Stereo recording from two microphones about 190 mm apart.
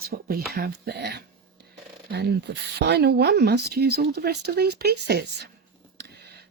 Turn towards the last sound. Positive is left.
turn(degrees=-60)  # may be behind; listen again after turning